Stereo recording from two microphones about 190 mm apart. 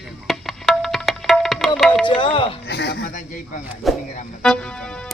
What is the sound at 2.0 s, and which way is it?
Speech, 25° left (ahead or behind).